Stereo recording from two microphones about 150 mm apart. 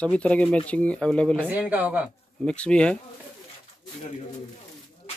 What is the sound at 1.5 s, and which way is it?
Speech, 10° right (ahead or behind).